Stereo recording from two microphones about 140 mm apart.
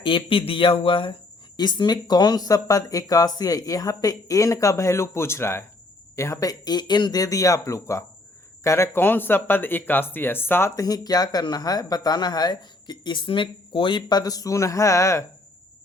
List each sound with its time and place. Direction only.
0.0 s speech: 40° left (ahead or behind); by 15.2 s 20° left (ahead or behind)